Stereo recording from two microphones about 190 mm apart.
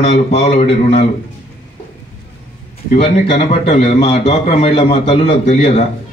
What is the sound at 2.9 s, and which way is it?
A man's voice, 35° left (ahead or behind).